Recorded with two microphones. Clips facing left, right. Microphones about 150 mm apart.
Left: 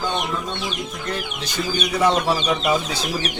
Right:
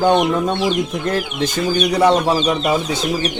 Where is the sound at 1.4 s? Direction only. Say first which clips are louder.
Right 7 dB; 50° right (ahead or behind).